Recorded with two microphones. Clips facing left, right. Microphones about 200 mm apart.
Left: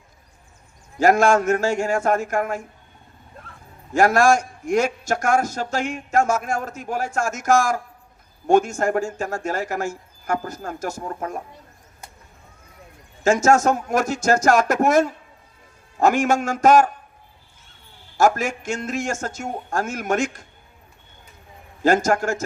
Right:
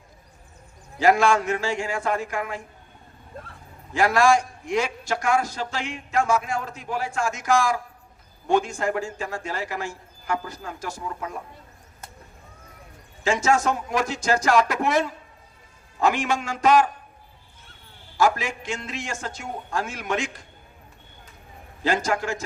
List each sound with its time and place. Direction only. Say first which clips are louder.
0.9 s a man's voice: left 3 dB; 45° left (ahead or behind)
3.9 s a man's voice: left 3 dB; 45° left (ahead or behind)
13.2 s a man's voice: left 5 dB; 45° left (ahead or behind)
18.2 s a man's voice: left 3 dB; 45° left (ahead or behind)
21.8 s a man's voice: left 6 dB; 45° left (ahead or behind)